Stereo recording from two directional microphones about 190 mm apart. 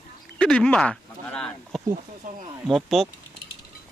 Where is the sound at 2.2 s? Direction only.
45° right (ahead or behind).